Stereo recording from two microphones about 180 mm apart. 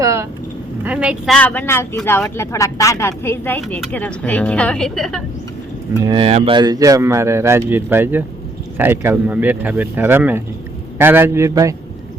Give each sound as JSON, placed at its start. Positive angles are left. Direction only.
{"t": 0.0, "sound": "vehicle", "side_deg": -15}
{"t": 0.9, "sound": "speech", "side_deg": -5}
{"t": 6.1, "sound": "speech", "side_deg": -30}